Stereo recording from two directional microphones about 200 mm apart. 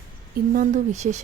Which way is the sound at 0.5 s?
40° right (ahead or behind).